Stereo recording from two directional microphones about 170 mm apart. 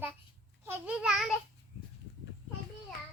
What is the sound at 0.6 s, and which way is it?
Speech, 5° right (ahead or behind).